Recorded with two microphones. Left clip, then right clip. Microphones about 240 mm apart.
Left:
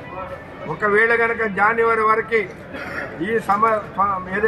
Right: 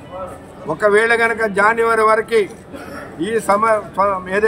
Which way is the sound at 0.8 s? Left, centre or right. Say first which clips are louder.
Right 3 dB; right.